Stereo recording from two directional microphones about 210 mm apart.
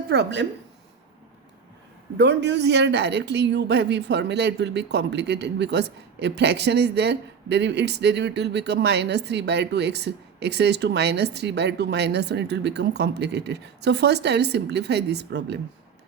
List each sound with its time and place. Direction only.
0.1 s speech: 55° right (ahead or behind)
2.1 s speech: 55° right (ahead or behind)